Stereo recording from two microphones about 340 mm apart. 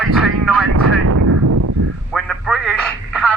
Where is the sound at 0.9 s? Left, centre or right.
Right.